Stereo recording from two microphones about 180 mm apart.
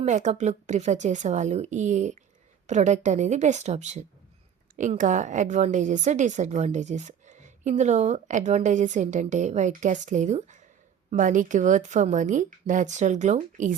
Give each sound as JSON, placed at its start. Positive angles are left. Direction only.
{"t": 0.0, "sound": "a woman's voice", "side_deg": -40}